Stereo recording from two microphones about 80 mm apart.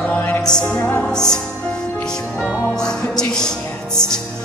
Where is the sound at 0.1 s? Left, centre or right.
Left.